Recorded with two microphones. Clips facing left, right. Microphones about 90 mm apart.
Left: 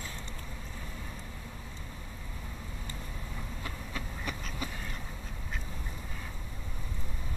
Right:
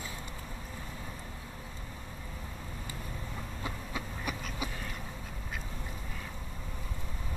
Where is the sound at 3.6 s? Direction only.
15° right (ahead or behind).